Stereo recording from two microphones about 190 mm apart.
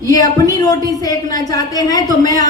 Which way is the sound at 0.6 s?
20° left (ahead or behind).